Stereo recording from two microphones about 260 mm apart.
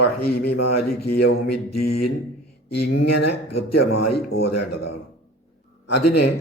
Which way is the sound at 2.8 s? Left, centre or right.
Left.